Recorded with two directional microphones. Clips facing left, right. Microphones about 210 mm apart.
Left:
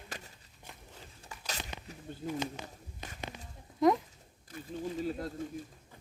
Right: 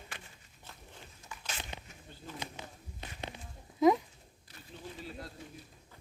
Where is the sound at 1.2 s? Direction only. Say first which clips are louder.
Left 2 dB; 35° left (ahead or behind).